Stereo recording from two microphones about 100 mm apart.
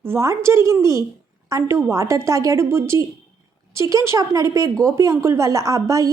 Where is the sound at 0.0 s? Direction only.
25° right (ahead or behind).